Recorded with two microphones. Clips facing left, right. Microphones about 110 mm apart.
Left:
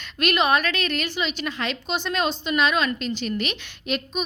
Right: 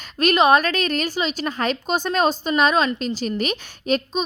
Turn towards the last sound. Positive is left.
turn(degrees=-40)  # may be behind; listen again after turning